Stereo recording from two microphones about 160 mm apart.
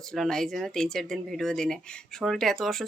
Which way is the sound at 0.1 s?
5° left (ahead or behind).